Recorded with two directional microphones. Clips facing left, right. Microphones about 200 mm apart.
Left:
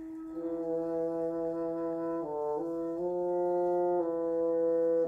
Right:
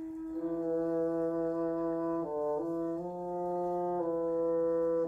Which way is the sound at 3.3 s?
10° left (ahead or behind).